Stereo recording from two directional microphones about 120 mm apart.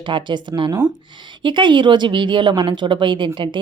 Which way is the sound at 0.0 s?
40° right (ahead or behind).